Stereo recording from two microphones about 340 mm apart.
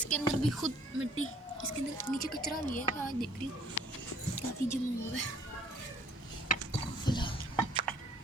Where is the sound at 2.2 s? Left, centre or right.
Left.